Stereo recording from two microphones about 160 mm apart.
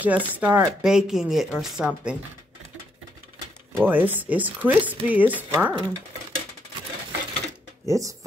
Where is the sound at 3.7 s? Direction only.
10° right (ahead or behind).